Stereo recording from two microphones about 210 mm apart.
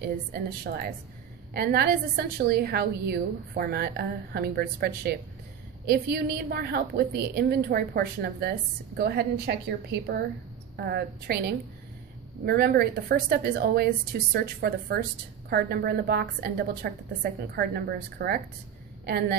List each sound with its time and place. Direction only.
0.0 s a woman's voice: 45° right (ahead or behind)